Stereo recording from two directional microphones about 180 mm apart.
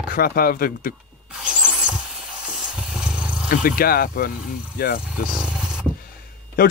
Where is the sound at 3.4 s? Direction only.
50° left (ahead or behind).